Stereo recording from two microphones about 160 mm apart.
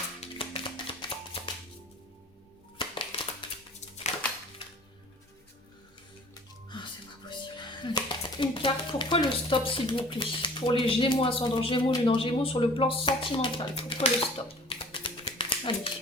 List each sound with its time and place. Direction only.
0.2 s music: 35° left (ahead or behind)
2.7 s a sound: 30° left (ahead or behind)
6.3 s music: 30° left (ahead or behind)
7.3 s speech: 30° left (ahead or behind)